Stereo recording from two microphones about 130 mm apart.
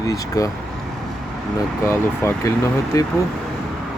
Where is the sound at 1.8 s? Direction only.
20° left (ahead or behind).